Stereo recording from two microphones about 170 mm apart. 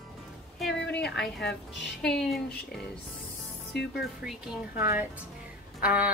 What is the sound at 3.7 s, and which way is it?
Speech, 75° left (ahead or behind).